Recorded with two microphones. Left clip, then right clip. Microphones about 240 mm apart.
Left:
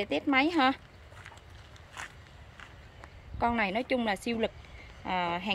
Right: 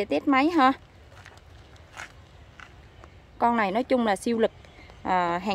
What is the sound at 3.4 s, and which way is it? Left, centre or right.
A woman's voice, centre.